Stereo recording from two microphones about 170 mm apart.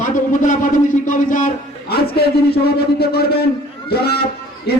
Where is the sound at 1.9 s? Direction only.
70° left (ahead or behind).